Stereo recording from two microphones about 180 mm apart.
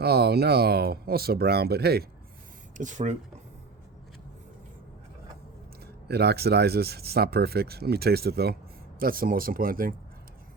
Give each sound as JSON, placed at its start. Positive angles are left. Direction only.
{"t": 0.0, "sound": "speech", "side_deg": -65}
{"t": 2.7, "sound": "speech", "side_deg": -45}
{"t": 6.1, "sound": "speech", "side_deg": -65}